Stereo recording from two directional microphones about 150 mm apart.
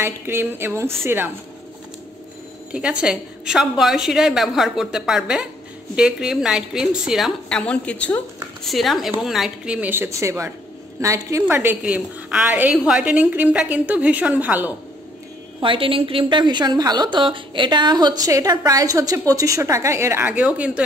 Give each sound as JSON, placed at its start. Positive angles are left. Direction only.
{"t": 0.0, "sound": "a woman's voice", "side_deg": -15}
{"t": 2.7, "sound": "a woman's voice", "side_deg": -5}
{"t": 15.6, "sound": "a woman's voice", "side_deg": -35}